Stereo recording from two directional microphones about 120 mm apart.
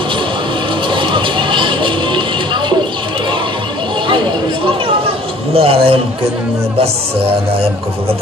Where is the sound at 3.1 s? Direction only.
40° right (ahead or behind).